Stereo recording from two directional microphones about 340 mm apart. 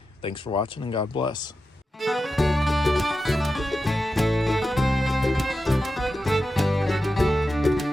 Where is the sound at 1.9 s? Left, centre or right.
Centre.